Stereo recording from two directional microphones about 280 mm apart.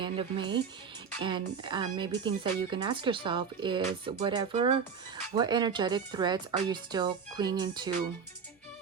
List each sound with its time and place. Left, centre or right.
0.0 s speech: centre